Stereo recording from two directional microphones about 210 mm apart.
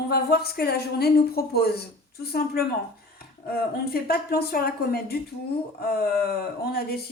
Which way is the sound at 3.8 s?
45° left (ahead or behind).